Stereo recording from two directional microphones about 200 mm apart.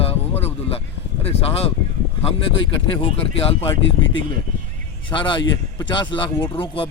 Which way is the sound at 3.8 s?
70° left (ahead or behind).